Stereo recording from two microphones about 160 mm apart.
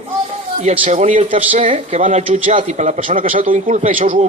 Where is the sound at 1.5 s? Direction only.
50° right (ahead or behind).